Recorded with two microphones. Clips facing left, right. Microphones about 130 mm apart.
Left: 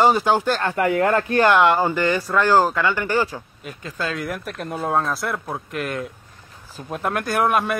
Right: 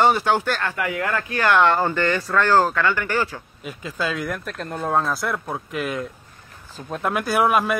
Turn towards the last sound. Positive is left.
turn(degrees=0)  # may be behind; listen again after turning